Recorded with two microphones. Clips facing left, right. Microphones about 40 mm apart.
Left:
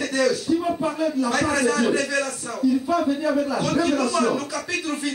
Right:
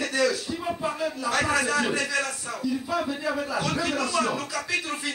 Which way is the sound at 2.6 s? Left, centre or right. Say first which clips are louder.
Left 8 dB; centre.